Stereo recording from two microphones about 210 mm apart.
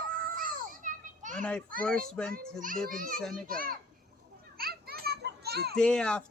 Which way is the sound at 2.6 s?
40° right (ahead or behind).